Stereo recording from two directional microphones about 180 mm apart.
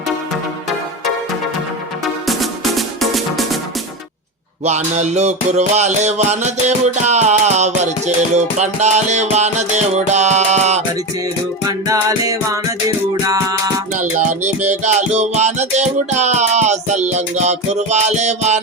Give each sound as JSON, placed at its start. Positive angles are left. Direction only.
{"t": 2.2, "sound": "music", "side_deg": 0}
{"t": 4.6, "sound": "music", "side_deg": -40}
{"t": 11.9, "sound": "music", "side_deg": -20}
{"t": 13.9, "sound": "music", "side_deg": -40}